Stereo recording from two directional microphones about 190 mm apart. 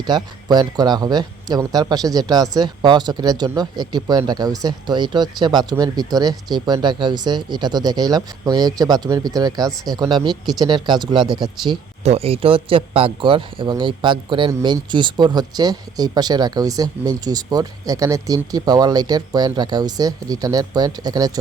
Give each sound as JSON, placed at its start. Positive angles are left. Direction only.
{"t": 0.0, "sound": "speech", "side_deg": -20}